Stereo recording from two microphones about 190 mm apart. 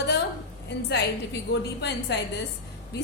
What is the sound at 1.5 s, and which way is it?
Speech, 60° left (ahead or behind).